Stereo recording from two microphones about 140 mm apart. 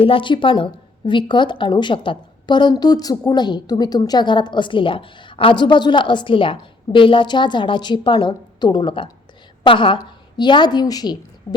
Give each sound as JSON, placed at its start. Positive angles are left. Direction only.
{"t": 0.0, "sound": "a woman's voice", "side_deg": 40}